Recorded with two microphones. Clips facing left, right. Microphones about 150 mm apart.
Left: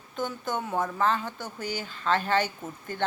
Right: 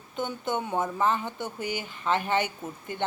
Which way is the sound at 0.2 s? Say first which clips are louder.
Right 1 dB; 25° right (ahead or behind).